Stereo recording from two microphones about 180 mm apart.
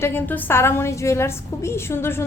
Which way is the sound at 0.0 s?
10° left (ahead or behind).